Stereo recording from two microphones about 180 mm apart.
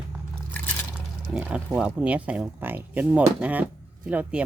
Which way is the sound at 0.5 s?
10° left (ahead or behind).